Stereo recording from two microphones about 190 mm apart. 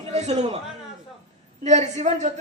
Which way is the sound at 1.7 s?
35° right (ahead or behind).